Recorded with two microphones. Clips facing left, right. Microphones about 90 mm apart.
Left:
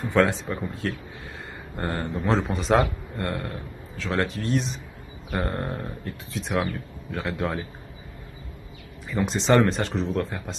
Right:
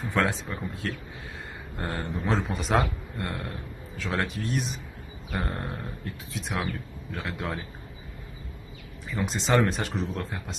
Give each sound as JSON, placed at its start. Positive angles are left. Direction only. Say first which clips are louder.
{"t": 0.0, "sound": "a man's voice", "louder": "left 5 dB", "side_deg": 0}
{"t": 9.2, "sound": "a man's voice", "louder": "left 4 dB", "side_deg": 0}